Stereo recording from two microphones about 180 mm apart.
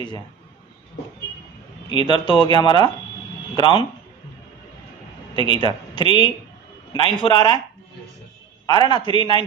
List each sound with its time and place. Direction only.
1.9 s speech: 25° left (ahead or behind)
5.3 s speech: 25° left (ahead or behind)
8.6 s speech: 25° left (ahead or behind)